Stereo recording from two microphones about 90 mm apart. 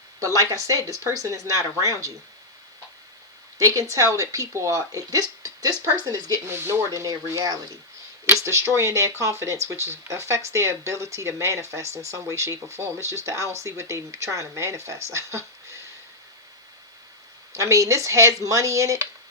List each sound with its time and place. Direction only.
0.2 s speech: 40° right (ahead or behind)
3.6 s speech: 40° right (ahead or behind)
6.5 s speech: 25° right (ahead or behind)
17.5 s speech: 35° right (ahead or behind)